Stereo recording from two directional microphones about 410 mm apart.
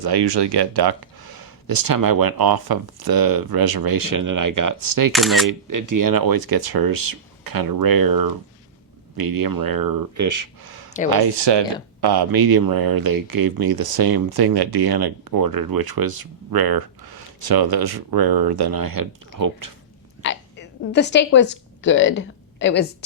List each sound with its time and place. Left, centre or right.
0.0 s speech: right
5.1 s speech: centre
5.5 s speech: right
11.1 s speech: right
11.9 s speech: right
20.2 s a woman's voice: left